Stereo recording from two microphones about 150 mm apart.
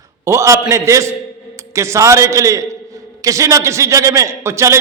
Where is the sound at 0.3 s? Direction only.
20° right (ahead or behind).